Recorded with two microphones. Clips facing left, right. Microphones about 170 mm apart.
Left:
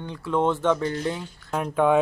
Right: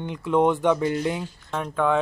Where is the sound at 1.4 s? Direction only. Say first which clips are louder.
Left 3 dB; 10° left (ahead or behind).